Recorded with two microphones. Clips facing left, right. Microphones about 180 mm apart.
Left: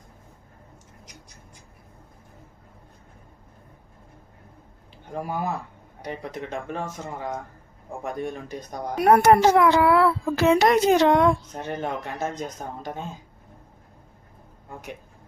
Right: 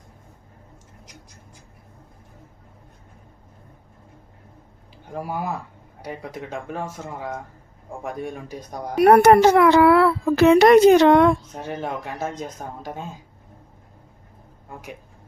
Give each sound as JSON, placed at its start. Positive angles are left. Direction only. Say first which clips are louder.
{"t": 5.1, "sound": "speech", "louder": "even", "side_deg": -5}
{"t": 9.0, "sound": "speech", "louder": "right 4 dB", "side_deg": -70}
{"t": 11.5, "sound": "speech", "louder": "even", "side_deg": -5}